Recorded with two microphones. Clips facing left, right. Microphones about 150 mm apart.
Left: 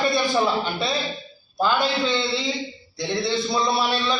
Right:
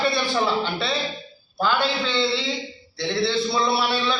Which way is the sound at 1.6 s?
15° left (ahead or behind).